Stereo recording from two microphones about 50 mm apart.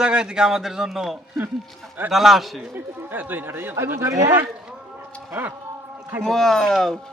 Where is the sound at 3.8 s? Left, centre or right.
Right.